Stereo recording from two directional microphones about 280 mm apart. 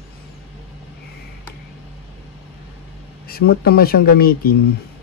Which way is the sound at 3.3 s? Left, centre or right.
Left.